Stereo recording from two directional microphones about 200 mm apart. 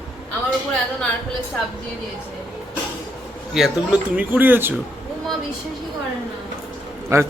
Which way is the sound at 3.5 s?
5° right (ahead or behind).